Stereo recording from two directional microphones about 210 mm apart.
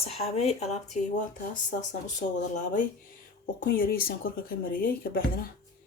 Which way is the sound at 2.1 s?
35° left (ahead or behind).